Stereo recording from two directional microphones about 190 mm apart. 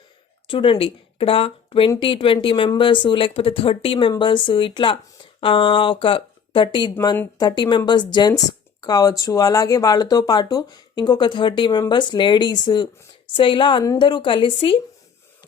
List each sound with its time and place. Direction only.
0.4 s speech: 25° left (ahead or behind)